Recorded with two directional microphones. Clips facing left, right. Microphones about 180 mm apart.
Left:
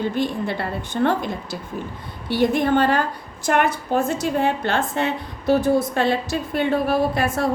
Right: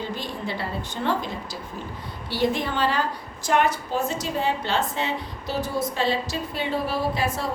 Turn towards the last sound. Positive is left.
turn(degrees=55)  # may be behind; listen again after turning